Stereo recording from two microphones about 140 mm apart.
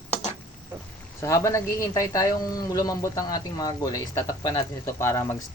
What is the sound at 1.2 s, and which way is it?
A man's voice, 20° left (ahead or behind).